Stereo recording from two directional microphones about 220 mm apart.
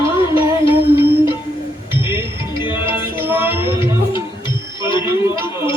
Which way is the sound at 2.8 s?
10° right (ahead or behind).